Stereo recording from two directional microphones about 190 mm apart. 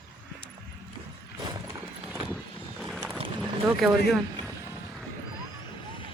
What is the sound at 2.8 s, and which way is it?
Boat, 5° right (ahead or behind).